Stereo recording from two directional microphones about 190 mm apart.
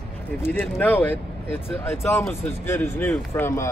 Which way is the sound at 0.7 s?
10° left (ahead or behind).